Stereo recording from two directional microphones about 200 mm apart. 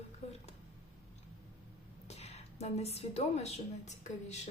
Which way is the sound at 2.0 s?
30° left (ahead or behind).